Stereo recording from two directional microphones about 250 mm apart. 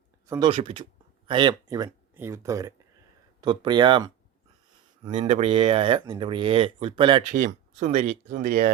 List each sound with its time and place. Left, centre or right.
0.3 s speech: centre
5.1 s speech: right